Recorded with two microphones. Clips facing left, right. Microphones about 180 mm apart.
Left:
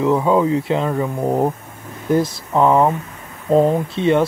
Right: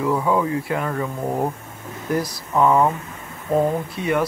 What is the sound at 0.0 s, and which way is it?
Speech, 20° left (ahead or behind).